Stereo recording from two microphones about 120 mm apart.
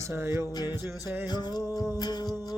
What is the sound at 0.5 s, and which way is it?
Music, 35° left (ahead or behind).